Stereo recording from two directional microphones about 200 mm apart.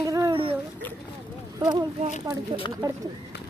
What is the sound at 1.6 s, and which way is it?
Speech, 20° right (ahead or behind).